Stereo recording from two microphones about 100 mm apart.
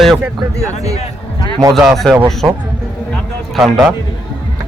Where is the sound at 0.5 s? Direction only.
35° right (ahead or behind).